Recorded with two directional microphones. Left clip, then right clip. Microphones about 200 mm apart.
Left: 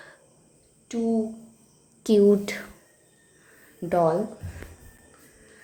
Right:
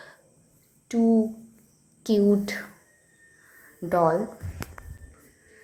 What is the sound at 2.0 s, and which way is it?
Speech, 15° left (ahead or behind).